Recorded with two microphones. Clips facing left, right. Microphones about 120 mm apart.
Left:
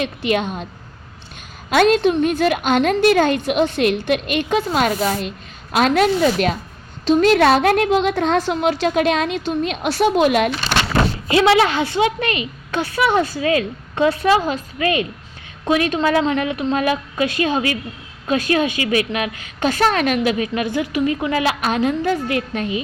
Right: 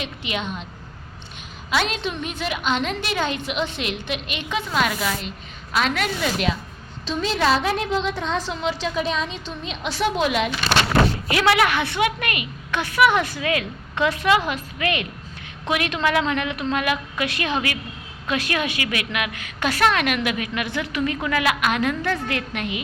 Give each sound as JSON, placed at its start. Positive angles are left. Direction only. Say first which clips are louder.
{"t": 0.0, "sound": "a woman's voice", "louder": "left 9 dB", "side_deg": 45}
{"t": 1.7, "sound": "a woman's voice", "louder": "left 10 dB", "side_deg": 50}
{"t": 7.0, "sound": "a woman's voice", "louder": "left 9 dB", "side_deg": 55}
{"t": 11.3, "sound": "a woman's voice", "louder": "left 5 dB", "side_deg": 25}